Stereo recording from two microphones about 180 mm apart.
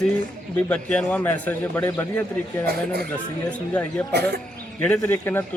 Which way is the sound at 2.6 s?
60° right (ahead or behind).